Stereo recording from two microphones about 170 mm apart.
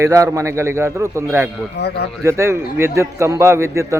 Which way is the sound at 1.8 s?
75° left (ahead or behind).